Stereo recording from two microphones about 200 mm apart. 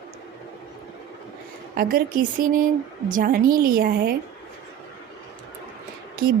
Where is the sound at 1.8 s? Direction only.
45° right (ahead or behind).